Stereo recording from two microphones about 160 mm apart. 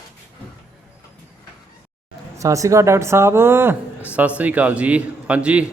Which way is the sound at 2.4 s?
20° right (ahead or behind).